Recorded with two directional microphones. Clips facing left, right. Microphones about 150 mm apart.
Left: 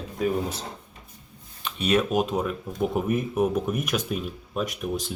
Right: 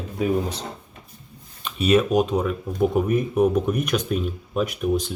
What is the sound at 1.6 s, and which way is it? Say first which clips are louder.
Speech: right 4 dB; centre (ahead or behind).